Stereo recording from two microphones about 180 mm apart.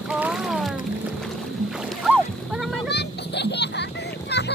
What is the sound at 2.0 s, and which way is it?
Boat, 5° right (ahead or behind).